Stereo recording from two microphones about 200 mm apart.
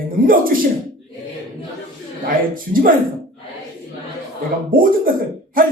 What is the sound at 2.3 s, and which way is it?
Speech, 45° right (ahead or behind).